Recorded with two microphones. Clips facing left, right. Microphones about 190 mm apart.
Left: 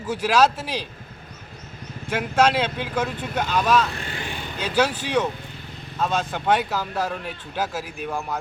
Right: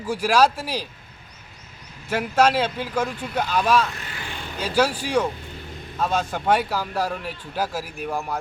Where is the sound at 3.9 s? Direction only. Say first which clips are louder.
Left 4 dB; 30° left (ahead or behind).